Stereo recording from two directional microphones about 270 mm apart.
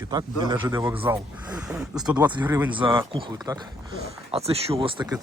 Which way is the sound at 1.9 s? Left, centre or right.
Centre.